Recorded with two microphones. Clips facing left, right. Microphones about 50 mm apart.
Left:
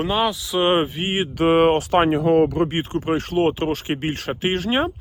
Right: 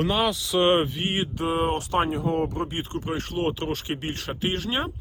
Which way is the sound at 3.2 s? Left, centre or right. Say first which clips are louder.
Left 6 dB; left.